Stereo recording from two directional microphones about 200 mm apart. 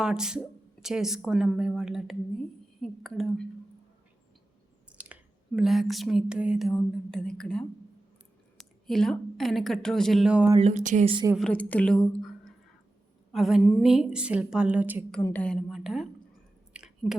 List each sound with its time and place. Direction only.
0.0 s speech: 5° right (ahead or behind)
4.9 s a woman's voice: 5° right (ahead or behind)
10.6 s speech: 35° right (ahead or behind)
11.1 s a woman's voice: 20° right (ahead or behind)
11.3 s speech: 5° left (ahead or behind)
12.1 s a sound: centre (ahead or behind)
13.3 s speech: centre (ahead or behind)
15.2 s speech: 10° left (ahead or behind)
16.7 s a sound: 5° right (ahead or behind)